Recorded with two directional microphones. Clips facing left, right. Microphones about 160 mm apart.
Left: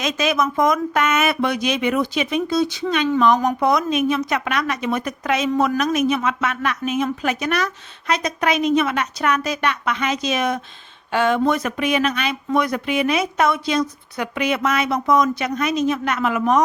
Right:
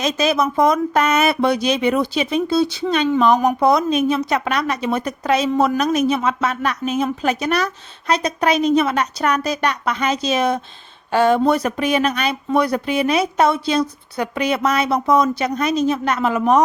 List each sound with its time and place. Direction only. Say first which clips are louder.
0.0 s a woman's voice: right 2 dB; 35° right (ahead or behind)